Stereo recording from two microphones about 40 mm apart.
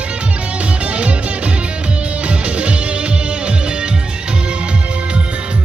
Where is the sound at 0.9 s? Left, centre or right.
Right.